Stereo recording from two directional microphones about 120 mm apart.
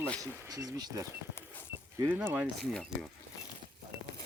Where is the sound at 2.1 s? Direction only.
15° right (ahead or behind).